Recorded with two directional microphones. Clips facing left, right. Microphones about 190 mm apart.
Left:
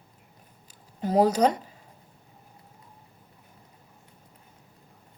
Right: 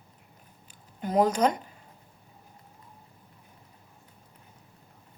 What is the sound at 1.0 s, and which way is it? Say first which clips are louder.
Speech: left 2 dB; 35° left (ahead or behind).